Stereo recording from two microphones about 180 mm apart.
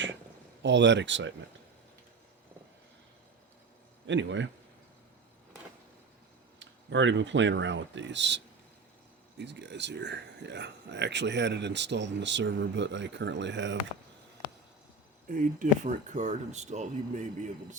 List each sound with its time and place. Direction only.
0.6 s speech: 80° right
4.0 s a man's voice: 90° right
6.6 s speech: 90° right
9.4 s speech: 75° right (ahead or behind)
15.3 s speech: 45° right (ahead or behind)